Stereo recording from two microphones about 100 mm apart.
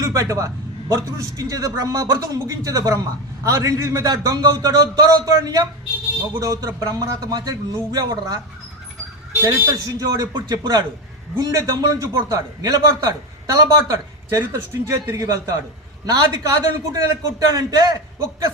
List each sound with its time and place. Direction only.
0.0 s a man's voice: 35° right (ahead or behind)
9.4 s a man's voice: 25° right (ahead or behind)